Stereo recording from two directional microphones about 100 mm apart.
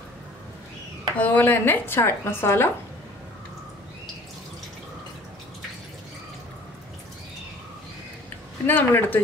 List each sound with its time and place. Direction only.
1.1 s speech: 15° left (ahead or behind)
8.6 s speech: 20° left (ahead or behind)